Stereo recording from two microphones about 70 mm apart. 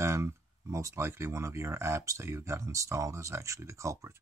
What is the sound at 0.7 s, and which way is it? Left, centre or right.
Speech, right.